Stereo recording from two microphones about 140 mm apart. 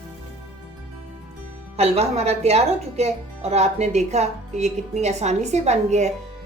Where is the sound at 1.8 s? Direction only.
50° right (ahead or behind).